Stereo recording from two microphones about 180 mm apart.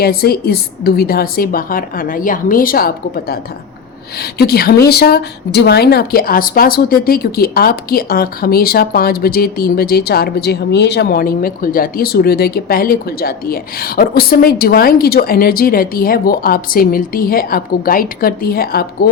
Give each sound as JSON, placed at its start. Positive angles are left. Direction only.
{"t": 0.0, "sound": "a woman's voice", "side_deg": 60}